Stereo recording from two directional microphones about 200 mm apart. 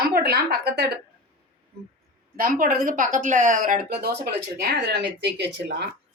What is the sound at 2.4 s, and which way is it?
A woman's voice, 45° right (ahead or behind).